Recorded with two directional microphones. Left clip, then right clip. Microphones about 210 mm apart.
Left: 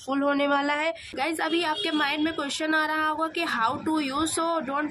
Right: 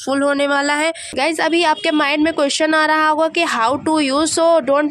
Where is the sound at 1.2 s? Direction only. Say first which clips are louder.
Right 11 dB; 45° right (ahead or behind).